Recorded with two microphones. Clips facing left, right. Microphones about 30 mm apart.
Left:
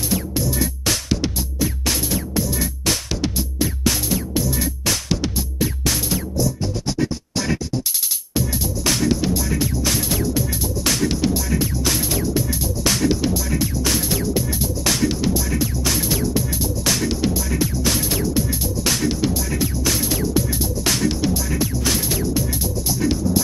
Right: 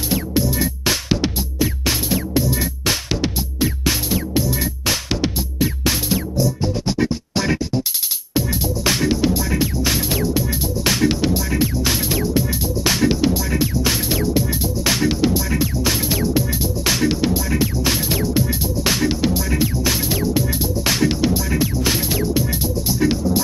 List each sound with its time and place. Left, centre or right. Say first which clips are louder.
0.1 s music: right 4 dB; centre